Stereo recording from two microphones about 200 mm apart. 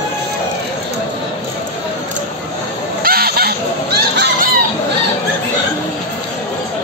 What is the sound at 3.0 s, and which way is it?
Fowl, 50° right (ahead or behind).